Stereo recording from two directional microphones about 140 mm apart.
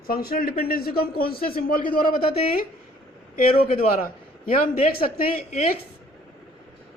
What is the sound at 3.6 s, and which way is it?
Speech, 90° left.